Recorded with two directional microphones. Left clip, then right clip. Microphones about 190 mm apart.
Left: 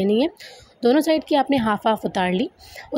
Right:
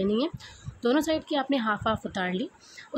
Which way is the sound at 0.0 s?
30° left (ahead or behind).